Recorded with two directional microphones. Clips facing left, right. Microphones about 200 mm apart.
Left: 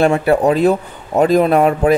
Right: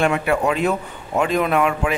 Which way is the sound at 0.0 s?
35° left (ahead or behind).